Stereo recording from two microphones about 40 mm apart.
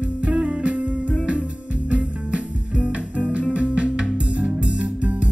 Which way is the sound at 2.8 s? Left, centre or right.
Right.